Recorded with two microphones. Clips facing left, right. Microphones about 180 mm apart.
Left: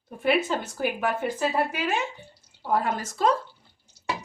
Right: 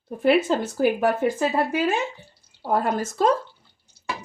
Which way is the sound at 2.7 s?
40° right (ahead or behind).